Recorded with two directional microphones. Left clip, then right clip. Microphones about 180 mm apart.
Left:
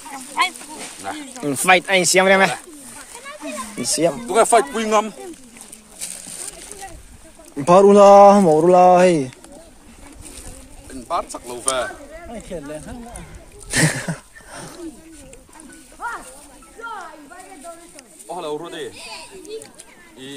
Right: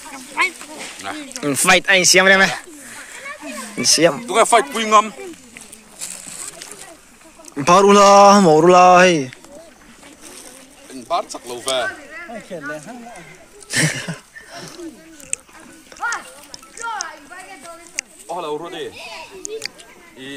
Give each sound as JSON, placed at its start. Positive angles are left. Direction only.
{"t": 0.4, "sound": "a sound", "side_deg": 65}
{"t": 1.3, "sound": "speech", "side_deg": 0}
{"t": 3.8, "sound": "speech", "side_deg": 0}
{"t": 4.3, "sound": "speech", "side_deg": 45}
{"t": 5.9, "sound": "splash", "side_deg": 65}
{"t": 7.5, "sound": "speech", "side_deg": 5}
{"t": 11.1, "sound": "speech", "side_deg": 40}
{"t": 13.7, "sound": "a sound", "side_deg": 25}
{"t": 16.8, "sound": "a sound", "side_deg": -10}
{"t": 18.3, "sound": "speech", "side_deg": 35}
{"t": 19.4, "sound": "speech", "side_deg": -30}